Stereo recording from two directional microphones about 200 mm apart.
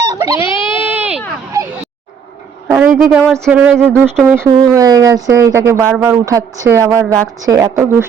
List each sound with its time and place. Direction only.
0.2 s a sound: 15° right (ahead or behind)
2.6 s speech: 10° right (ahead or behind)
4.4 s speech: 20° right (ahead or behind)